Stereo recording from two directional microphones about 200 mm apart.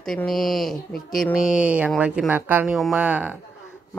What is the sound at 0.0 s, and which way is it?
Speech, centre (ahead or behind).